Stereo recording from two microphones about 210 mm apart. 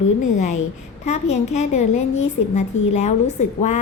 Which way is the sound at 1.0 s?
30° left (ahead or behind).